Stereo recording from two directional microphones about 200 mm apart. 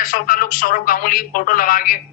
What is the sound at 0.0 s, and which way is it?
Speech, 45° left (ahead or behind).